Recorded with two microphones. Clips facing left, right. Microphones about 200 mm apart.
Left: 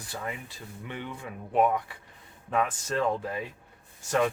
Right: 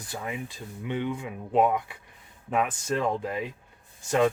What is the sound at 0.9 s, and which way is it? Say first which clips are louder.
Speech: right 8 dB; 15° right (ahead or behind).